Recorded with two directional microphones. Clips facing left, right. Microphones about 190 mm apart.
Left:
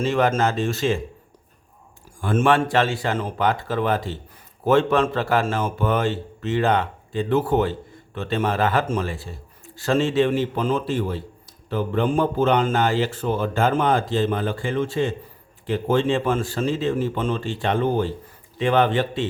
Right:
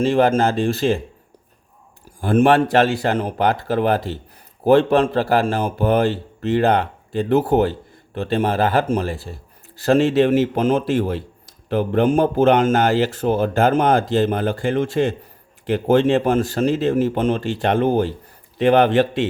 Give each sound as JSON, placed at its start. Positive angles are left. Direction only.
{"t": 0.0, "sound": "speech", "side_deg": -35}
{"t": 2.2, "sound": "speech", "side_deg": -35}
{"t": 10.6, "sound": "speech", "side_deg": -75}
{"t": 11.4, "sound": "a sound", "side_deg": -75}
{"t": 12.4, "sound": "speech", "side_deg": -80}
{"t": 12.7, "sound": "speech", "side_deg": -40}
{"t": 13.2, "sound": "speech", "side_deg": -55}
{"t": 13.6, "sound": "speech", "side_deg": -40}
{"t": 15.0, "sound": "speech", "side_deg": -65}
{"t": 16.1, "sound": "speech", "side_deg": -40}
{"t": 17.2, "sound": "speech", "side_deg": -70}
{"t": 17.7, "sound": "speech", "side_deg": -45}
{"t": 18.9, "sound": "speech", "side_deg": -75}